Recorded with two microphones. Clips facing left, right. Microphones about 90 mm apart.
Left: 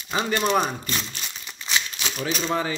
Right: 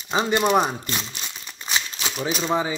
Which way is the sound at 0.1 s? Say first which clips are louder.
Right 3 dB; 20° right (ahead or behind).